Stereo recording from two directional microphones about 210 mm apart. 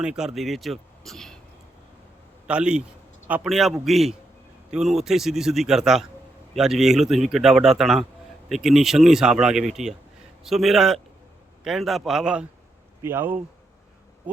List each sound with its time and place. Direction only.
0.0 s speech: 5° right (ahead or behind)
2.5 s speech: 5° right (ahead or behind)